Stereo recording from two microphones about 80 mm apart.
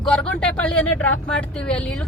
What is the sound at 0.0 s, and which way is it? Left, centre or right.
A woman's voice, centre.